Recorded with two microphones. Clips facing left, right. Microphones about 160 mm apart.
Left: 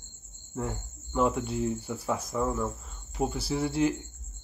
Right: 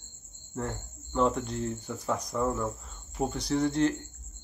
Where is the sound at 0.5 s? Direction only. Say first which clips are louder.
Left 1 dB; 5° left (ahead or behind).